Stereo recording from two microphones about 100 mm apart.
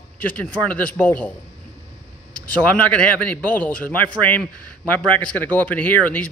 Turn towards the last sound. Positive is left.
turn(degrees=15)  # may be behind; listen again after turning